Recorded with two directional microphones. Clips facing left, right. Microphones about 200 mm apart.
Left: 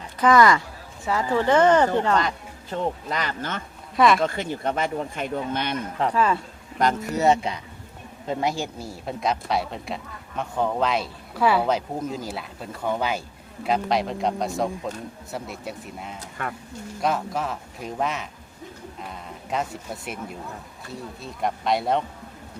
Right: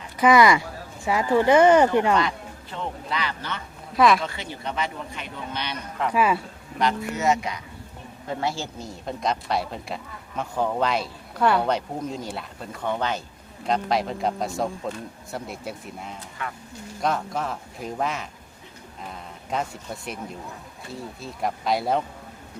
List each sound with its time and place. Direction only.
0.2 s speech: 10° right (ahead or behind)
2.1 s a man's voice: 45° left (ahead or behind)
3.9 s speech: centre (ahead or behind)
4.2 s a man's voice: 50° left (ahead or behind)
6.1 s speech: 10° right (ahead or behind)
6.7 s speech: 45° left (ahead or behind)
8.3 s speech: 20° left (ahead or behind); by 16.1 s centre (ahead or behind)
16.4 s a man's voice: 50° left (ahead or behind)
17.0 s speech: centre (ahead or behind)